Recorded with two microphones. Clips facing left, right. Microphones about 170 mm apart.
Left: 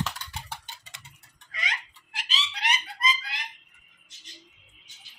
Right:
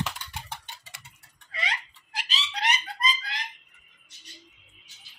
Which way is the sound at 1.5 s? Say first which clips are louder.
Right 3 dB; 35° right (ahead or behind).